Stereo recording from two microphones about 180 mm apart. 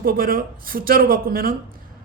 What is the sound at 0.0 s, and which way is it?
A man's voice, 55° right (ahead or behind).